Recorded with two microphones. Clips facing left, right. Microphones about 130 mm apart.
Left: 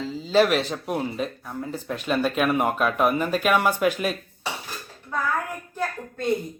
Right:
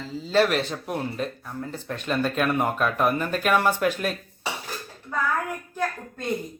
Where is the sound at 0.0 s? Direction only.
5° left (ahead or behind).